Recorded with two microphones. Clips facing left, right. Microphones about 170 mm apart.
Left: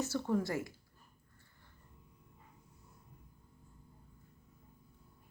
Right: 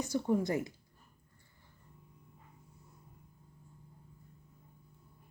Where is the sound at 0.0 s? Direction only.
15° right (ahead or behind).